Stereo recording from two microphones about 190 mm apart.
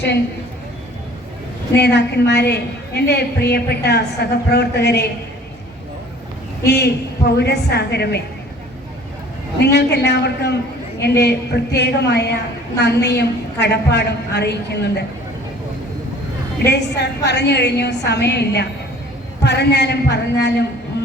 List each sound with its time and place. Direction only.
1.7 s a woman's voice: 60° left (ahead or behind)
6.7 s a woman's voice: 60° left (ahead or behind)
9.7 s a woman's voice: 65° left (ahead or behind)
16.6 s a woman's voice: 60° left (ahead or behind)
20.9 s music: 60° left (ahead or behind)